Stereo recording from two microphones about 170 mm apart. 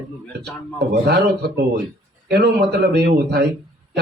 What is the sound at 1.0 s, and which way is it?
A man's voice, 70° right (ahead or behind).